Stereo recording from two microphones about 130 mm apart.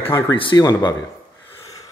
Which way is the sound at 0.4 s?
35° left (ahead or behind).